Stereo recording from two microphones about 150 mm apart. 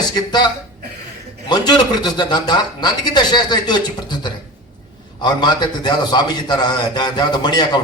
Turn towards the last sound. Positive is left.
turn(degrees=30)  # may be behind; listen again after turning